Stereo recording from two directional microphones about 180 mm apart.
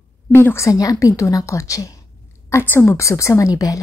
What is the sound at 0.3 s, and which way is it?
A woman's voice, 10° left (ahead or behind).